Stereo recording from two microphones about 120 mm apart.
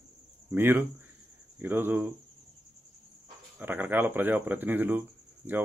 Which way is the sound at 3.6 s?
15° right (ahead or behind).